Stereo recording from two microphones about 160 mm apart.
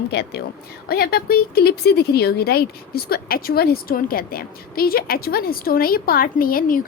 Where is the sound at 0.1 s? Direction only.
90° left.